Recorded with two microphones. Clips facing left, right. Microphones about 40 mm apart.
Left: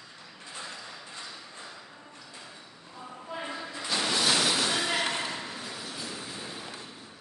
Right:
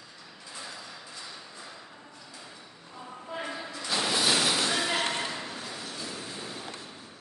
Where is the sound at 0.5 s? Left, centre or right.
Left.